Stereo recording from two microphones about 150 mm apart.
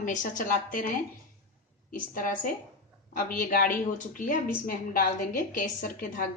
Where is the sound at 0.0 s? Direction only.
60° left (ahead or behind).